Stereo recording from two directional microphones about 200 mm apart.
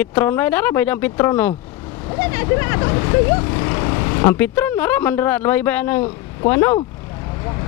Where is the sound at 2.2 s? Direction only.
10° left (ahead or behind).